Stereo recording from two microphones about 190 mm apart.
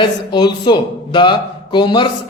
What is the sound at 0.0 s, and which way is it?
Speech, 25° left (ahead or behind).